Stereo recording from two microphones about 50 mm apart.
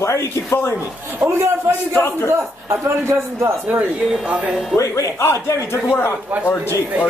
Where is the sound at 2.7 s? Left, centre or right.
Right.